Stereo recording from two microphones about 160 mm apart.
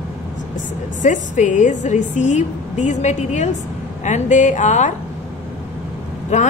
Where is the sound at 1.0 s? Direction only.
50° left (ahead or behind).